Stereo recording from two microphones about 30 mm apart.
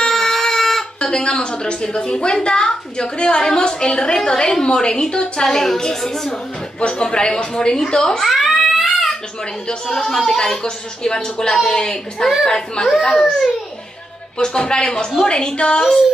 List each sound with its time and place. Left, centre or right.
0.0 s a sound: centre
0.9 s a woman's voice: left
5.4 s a woman's voice: centre
6.8 s a woman's voice: left
8.2 s cat: centre
9.9 s a woman's voice: centre
10.6 s a woman's voice: left
14.4 s a woman's voice: left